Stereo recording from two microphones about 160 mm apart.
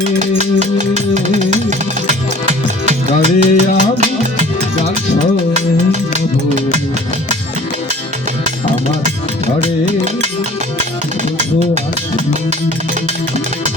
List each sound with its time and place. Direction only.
0.2 s music: 45° right (ahead or behind)
5.5 s music: 45° right (ahead or behind)